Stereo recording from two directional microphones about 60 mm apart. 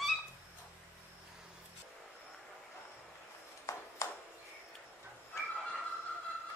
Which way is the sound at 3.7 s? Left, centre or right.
Left.